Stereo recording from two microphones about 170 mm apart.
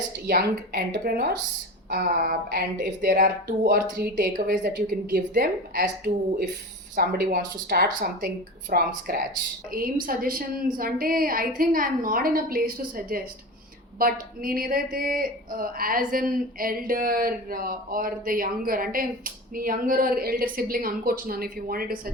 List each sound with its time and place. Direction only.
0.3 s a woman's voice: 65° right (ahead or behind)
6.9 s a woman's voice: 65° right (ahead or behind)